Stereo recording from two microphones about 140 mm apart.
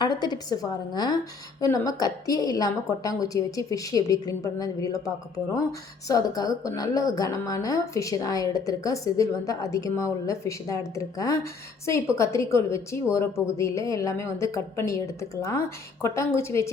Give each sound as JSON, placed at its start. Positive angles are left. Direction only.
{"t": 0.0, "sound": "a woman's voice", "side_deg": 30}